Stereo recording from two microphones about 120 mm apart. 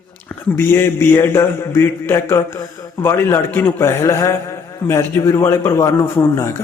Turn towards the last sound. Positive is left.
turn(degrees=25)  # may be behind; listen again after turning